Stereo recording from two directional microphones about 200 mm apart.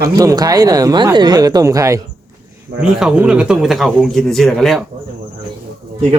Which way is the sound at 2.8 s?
5° right (ahead or behind).